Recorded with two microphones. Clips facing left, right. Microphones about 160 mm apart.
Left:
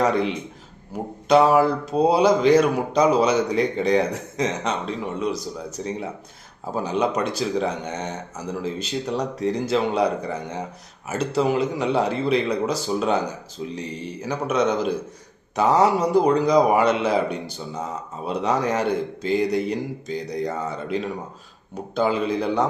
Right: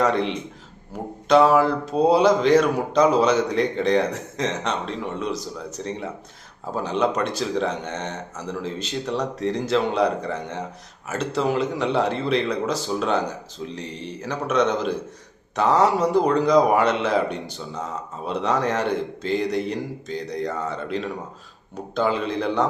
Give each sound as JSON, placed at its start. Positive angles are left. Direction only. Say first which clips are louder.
{"t": 0.0, "sound": "a man's voice", "louder": "even", "side_deg": 5}